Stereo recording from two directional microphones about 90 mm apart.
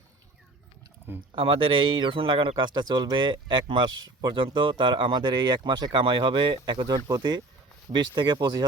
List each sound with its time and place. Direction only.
1.3 s a man's voice: 75° right (ahead or behind); by 8.6 s 50° right (ahead or behind)